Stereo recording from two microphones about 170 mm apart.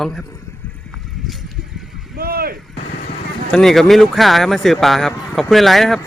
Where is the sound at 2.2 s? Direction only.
65° right (ahead or behind).